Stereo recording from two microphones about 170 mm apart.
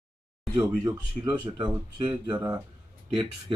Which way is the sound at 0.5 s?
25° right (ahead or behind).